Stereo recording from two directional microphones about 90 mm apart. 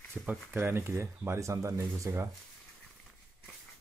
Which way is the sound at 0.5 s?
25° right (ahead or behind).